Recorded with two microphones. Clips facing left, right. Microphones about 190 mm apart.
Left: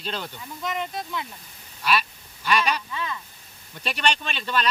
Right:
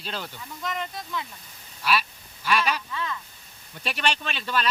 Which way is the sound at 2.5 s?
5° right (ahead or behind).